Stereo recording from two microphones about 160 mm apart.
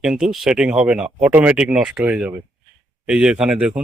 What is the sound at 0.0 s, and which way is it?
Speech, 5° right (ahead or behind).